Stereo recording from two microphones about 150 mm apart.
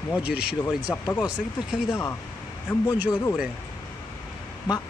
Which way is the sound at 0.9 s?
20° left (ahead or behind).